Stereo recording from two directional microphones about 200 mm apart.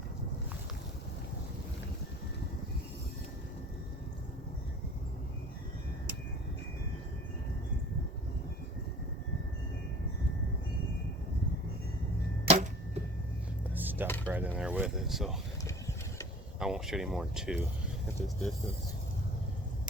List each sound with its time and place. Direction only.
12.5 s arrow: 30° right (ahead or behind)
13.7 s a sound: 10° right (ahead or behind)
16.6 s speech: centre (ahead or behind)